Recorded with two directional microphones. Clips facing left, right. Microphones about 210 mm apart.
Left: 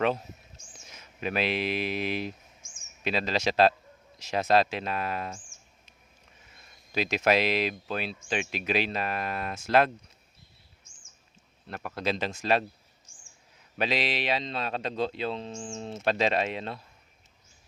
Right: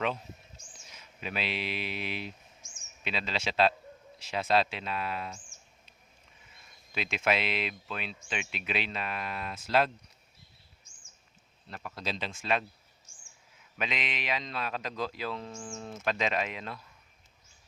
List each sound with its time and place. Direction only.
0.9 s speech: 45° left (ahead or behind)
6.9 s speech: 40° left (ahead or behind)
11.7 s speech: 60° left (ahead or behind); by 12.6 s 40° left (ahead or behind)
13.7 s speech: 35° left (ahead or behind)